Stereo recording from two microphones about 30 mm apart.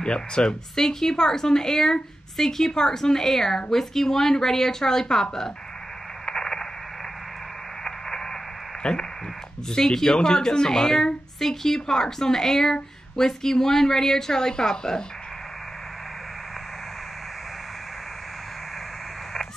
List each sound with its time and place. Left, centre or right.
0.0 s a woman's voice: left
6.2 s radio: centre
8.8 s a woman's voice: left
9.7 s a woman's voice: centre
11.3 s a woman's voice: centre